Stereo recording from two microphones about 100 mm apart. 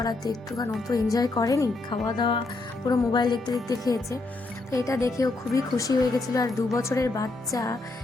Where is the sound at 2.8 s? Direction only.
35° left (ahead or behind).